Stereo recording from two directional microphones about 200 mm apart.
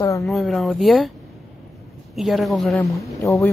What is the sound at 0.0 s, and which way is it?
Speech, 15° left (ahead or behind).